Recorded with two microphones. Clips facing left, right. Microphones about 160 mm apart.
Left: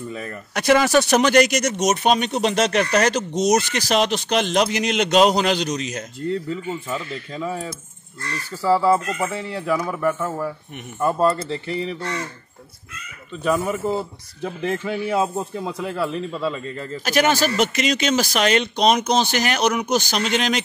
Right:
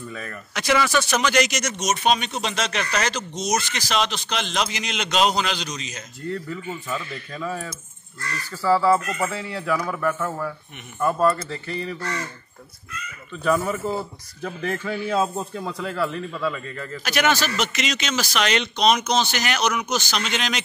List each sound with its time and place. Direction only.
0.1 s a man's voice: 20° left (ahead or behind)
0.6 s speech: 55° left (ahead or behind)
1.2 s a man's voice: 55° left (ahead or behind)
6.3 s a man's voice: 25° left (ahead or behind)
13.3 s a man's voice: 15° left (ahead or behind); by 17.6 s 35° left (ahead or behind)
17.6 s speech: 50° left (ahead or behind)